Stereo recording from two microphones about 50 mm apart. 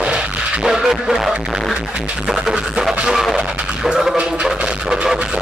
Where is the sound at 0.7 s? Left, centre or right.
Centre.